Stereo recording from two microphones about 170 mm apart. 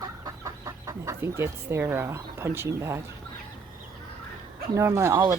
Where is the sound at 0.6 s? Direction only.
20° right (ahead or behind).